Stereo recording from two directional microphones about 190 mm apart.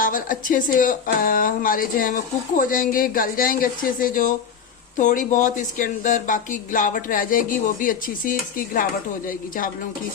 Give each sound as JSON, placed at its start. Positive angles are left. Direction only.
{"t": 0.0, "sound": "speech", "side_deg": 45}